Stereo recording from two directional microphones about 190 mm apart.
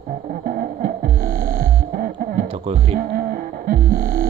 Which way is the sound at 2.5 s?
30° right (ahead or behind).